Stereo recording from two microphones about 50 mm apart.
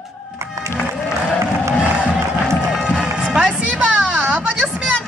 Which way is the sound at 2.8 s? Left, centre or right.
Centre.